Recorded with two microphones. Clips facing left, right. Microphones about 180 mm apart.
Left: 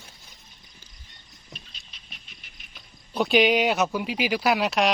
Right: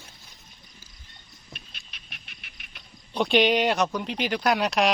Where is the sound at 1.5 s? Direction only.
60° right (ahead or behind).